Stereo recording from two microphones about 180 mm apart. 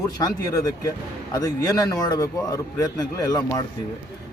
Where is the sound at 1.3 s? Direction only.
20° left (ahead or behind).